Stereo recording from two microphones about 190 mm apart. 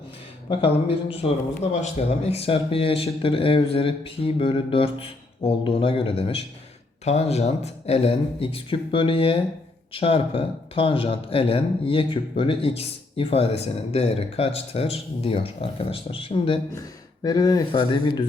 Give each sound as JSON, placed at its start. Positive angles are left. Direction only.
{"t": 0.4, "sound": "speech", "side_deg": 30}